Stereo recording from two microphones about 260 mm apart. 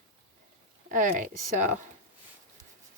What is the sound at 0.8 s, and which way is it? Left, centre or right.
Speech, right.